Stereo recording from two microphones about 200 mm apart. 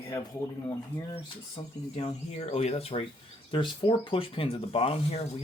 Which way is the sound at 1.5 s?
30° left (ahead or behind).